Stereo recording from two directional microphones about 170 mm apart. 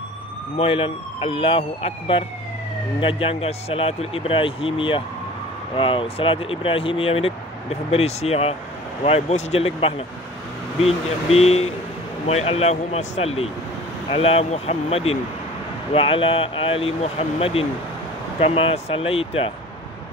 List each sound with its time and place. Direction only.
0.6 s speech: 30° left (ahead or behind)